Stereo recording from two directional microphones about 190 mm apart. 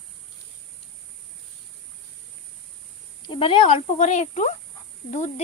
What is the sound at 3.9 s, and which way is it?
Speech, 40° left (ahead or behind).